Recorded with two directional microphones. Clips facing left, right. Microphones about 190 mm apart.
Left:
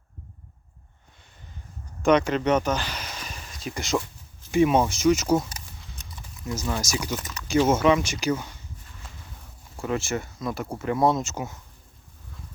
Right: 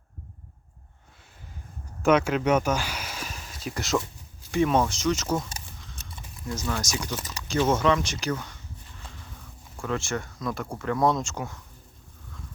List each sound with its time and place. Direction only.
2.0 s speech: 5° right (ahead or behind)
4.5 s speech: 15° left (ahead or behind)
6.5 s speech: 10° left (ahead or behind)
9.7 s speech: 15° left (ahead or behind)